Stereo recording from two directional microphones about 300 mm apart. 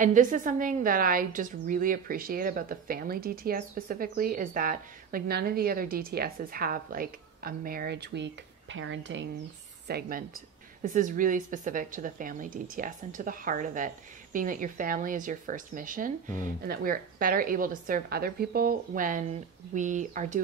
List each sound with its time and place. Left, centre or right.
0.0 s a woman's voice: right